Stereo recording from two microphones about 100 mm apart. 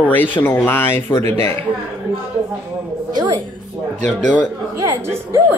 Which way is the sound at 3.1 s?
45° right (ahead or behind).